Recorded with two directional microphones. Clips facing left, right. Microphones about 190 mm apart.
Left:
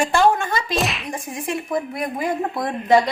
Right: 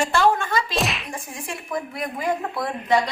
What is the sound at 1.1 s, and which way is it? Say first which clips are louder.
Whip: left 6 dB; 20° left (ahead or behind).